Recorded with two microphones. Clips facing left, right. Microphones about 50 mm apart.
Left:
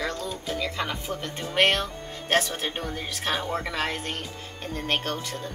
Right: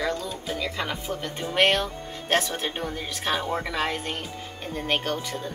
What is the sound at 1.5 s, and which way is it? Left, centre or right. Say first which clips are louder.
Speech: right 1 dB; centre.